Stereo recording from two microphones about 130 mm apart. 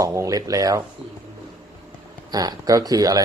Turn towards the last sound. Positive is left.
turn(degrees=-25)  # may be behind; listen again after turning